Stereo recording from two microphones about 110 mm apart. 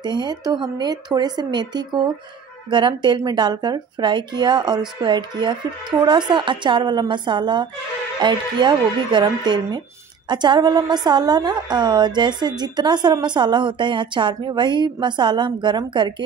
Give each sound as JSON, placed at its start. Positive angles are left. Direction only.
{"t": 0.0, "sound": "a woman's voice", "side_deg": -40}